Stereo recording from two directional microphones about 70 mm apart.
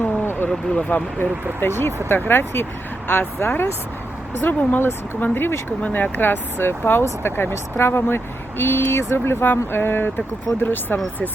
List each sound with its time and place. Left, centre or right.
0.0 s vehicle: left
0.7 s speech: centre
1.2 s speech: left